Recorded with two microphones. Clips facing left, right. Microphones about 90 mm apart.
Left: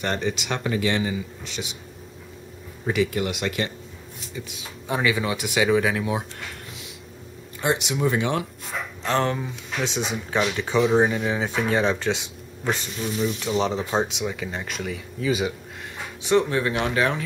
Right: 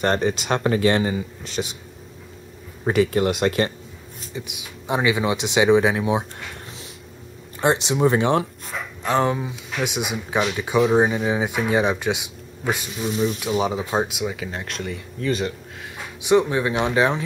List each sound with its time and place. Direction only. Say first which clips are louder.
0.0 s speech: right 5 dB; 45° right (ahead or behind)
2.8 s speech: right 5 dB; 40° right (ahead or behind)
4.5 s speech: right 3 dB; 20° right (ahead or behind)
7.6 s speech: right 4 dB; 30° right (ahead or behind)
9.0 s speech: right 3 dB; 15° right (ahead or behind); by 15.5 s 5° left (ahead or behind)
16.2 s speech: right 3 dB; 15° right (ahead or behind)